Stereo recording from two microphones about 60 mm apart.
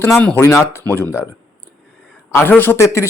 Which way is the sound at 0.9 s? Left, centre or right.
Left.